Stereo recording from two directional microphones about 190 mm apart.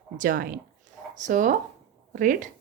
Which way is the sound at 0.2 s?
45° right (ahead or behind).